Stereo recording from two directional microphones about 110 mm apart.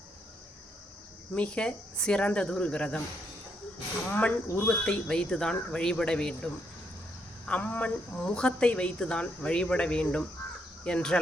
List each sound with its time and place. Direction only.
1.4 s a woman's voice: 10° left (ahead or behind)
4.1 s a woman's voice: 15° left (ahead or behind)
4.8 s a woman's voice: 5° left (ahead or behind)